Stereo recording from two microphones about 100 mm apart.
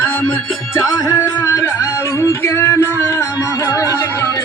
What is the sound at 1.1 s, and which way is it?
Music, 25° left (ahead or behind).